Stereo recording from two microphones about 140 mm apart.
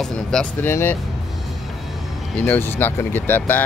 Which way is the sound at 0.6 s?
15° left (ahead or behind).